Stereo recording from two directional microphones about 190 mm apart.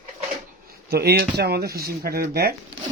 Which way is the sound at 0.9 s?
55° right (ahead or behind).